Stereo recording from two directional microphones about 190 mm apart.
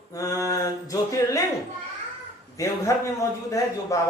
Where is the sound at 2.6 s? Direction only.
15° left (ahead or behind).